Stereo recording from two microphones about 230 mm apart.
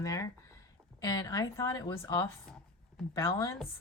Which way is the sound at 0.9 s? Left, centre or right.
Centre.